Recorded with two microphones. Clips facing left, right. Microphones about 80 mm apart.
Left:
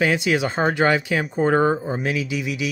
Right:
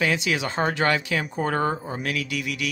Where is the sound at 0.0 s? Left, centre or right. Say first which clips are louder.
Left 4 dB; centre.